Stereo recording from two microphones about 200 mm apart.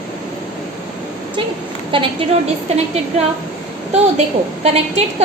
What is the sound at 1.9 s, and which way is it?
Speech, 25° right (ahead or behind).